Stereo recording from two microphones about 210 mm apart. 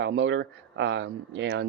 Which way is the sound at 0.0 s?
60° right (ahead or behind).